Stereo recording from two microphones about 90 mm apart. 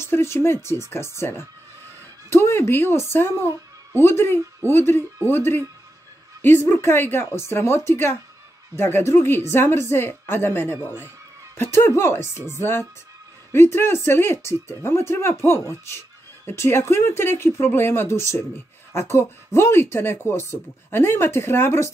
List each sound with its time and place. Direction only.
0.0 s speech: 30° left (ahead or behind)